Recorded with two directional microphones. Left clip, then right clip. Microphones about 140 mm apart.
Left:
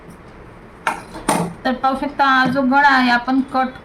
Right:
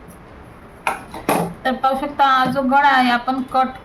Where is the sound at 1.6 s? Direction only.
15° right (ahead or behind).